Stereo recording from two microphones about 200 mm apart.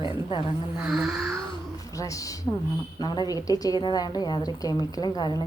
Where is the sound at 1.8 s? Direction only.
15° left (ahead or behind).